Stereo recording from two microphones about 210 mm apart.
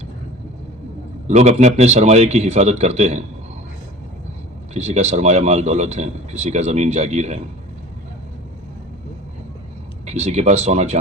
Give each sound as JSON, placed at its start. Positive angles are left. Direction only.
{"t": 1.3, "sound": "speech", "side_deg": -30}
{"t": 4.7, "sound": "speech", "side_deg": -30}
{"t": 10.1, "sound": "speech", "side_deg": -30}